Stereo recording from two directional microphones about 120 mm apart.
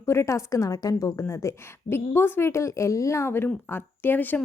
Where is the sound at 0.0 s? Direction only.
25° left (ahead or behind).